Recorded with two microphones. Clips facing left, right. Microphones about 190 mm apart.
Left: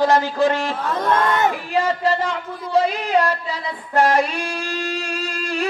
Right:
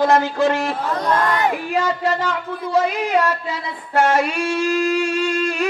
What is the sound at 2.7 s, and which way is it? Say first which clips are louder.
Music: even; 35° left (ahead or behind).